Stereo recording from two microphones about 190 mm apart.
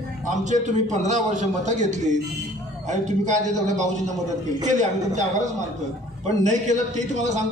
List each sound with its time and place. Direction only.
0.3 s a man's voice: 40° right (ahead or behind)
6.4 s a man's voice: 40° right (ahead or behind)